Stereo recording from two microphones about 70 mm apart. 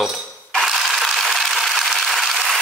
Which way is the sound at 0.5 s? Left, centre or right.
Centre.